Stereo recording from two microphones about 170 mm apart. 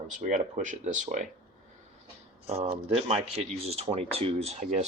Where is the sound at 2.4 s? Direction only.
35° right (ahead or behind).